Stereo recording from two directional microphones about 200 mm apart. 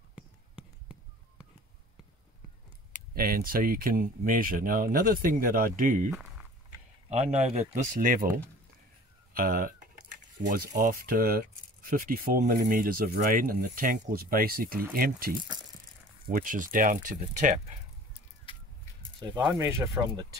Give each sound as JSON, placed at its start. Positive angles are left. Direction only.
{"t": 0.1, "sound": "a sound", "side_deg": -5}
{"t": 3.2, "sound": "speech", "side_deg": -50}
{"t": 7.1, "sound": "speech", "side_deg": -35}
{"t": 19.3, "sound": "speech", "side_deg": -10}